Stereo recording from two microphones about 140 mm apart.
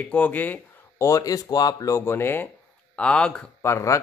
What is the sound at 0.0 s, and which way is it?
Speech, 10° left (ahead or behind).